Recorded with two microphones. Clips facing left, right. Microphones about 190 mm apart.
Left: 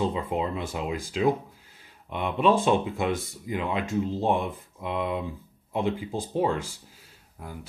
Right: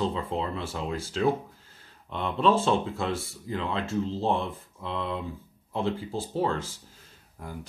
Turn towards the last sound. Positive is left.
turn(degrees=5)  # may be behind; listen again after turning